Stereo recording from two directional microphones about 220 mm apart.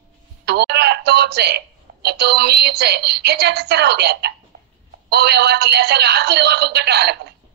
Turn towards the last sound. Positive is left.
turn(degrees=-50)  # may be behind; listen again after turning